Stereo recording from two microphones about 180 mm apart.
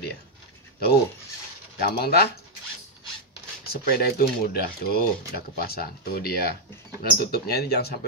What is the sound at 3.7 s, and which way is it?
Speech, 60° left (ahead or behind).